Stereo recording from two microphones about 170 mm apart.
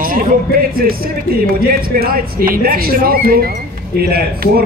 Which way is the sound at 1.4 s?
60° right (ahead or behind).